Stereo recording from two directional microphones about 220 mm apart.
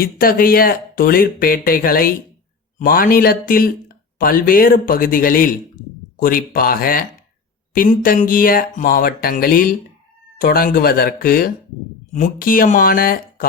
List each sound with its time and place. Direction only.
0.0 s speech: 40° left (ahead or behind)